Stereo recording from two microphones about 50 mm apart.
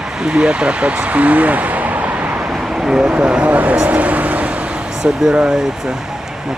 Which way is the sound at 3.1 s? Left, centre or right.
Right.